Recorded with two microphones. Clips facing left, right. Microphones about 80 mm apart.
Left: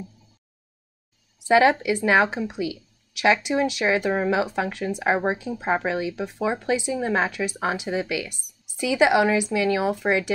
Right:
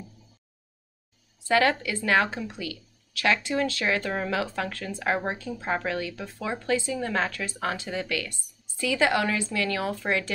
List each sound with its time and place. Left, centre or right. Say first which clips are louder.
1.4 s speech: left 5 dB; centre